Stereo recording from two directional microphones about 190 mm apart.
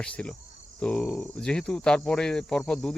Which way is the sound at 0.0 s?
5° left (ahead or behind).